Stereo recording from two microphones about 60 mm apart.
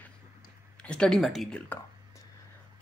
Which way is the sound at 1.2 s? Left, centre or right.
Centre.